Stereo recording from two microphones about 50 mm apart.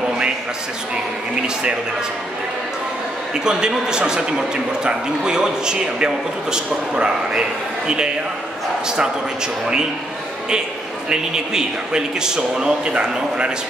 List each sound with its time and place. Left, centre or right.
3.3 s a man's voice: centre
11.1 s a man's voice: centre